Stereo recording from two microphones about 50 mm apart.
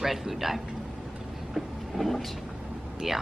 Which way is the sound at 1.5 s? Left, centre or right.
Centre.